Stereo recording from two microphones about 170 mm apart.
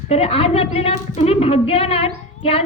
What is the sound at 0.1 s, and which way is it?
A woman's voice, 35° left (ahead or behind).